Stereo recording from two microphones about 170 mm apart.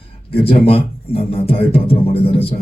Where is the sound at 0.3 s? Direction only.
35° left (ahead or behind).